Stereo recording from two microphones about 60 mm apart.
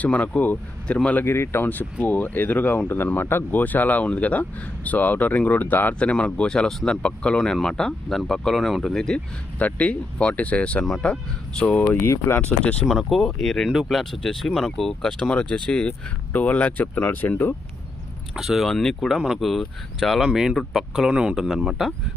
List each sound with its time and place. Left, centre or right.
0.0 s speech: left
1.2 s speech: left; by 9.2 s centre
9.6 s speech: left
12.0 s speech: left
12.4 s speech: left
13.1 s speech: centre; by 17.5 s left
18.3 s speech: centre
18.7 s speech: centre
18.9 s speech: centre
21.1 s speech: centre
21.3 s speech: centre